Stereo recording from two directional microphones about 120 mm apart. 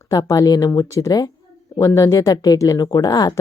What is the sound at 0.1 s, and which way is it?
Speech, 30° left (ahead or behind).